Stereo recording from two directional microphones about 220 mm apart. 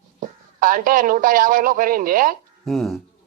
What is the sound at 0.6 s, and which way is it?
A man's voice, 40° right (ahead or behind).